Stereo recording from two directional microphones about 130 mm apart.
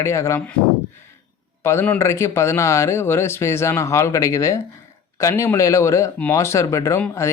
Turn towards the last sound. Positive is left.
turn(degrees=25)  # may be behind; listen again after turning